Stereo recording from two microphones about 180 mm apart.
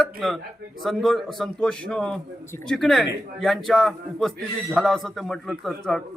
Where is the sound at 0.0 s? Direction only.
Centre (ahead or behind).